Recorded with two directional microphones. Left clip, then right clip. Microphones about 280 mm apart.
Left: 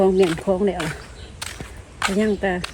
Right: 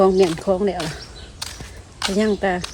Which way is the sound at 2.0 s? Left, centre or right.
Centre.